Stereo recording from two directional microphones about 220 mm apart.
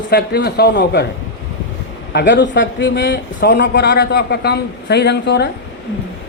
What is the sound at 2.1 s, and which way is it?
Speech, 55° left (ahead or behind).